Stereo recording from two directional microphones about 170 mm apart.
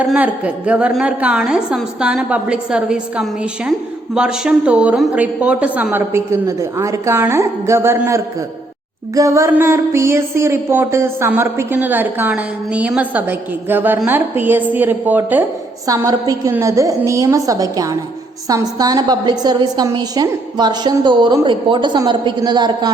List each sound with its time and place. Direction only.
0.0 s a woman's voice: 10° right (ahead or behind)
15.9 s a woman's voice: 20° right (ahead or behind)